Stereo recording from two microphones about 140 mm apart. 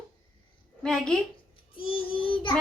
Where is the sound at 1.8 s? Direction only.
40° left (ahead or behind).